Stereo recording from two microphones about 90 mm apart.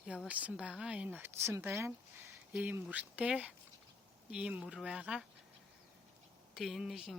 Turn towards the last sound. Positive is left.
turn(degrees=-5)  # may be behind; listen again after turning